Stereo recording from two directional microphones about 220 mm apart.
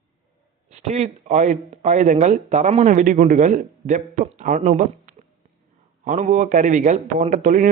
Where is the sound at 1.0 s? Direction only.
35° right (ahead or behind).